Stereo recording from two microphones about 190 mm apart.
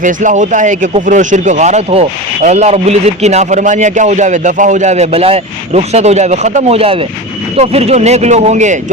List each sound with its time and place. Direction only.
0.0 s speech: 40° right (ahead or behind)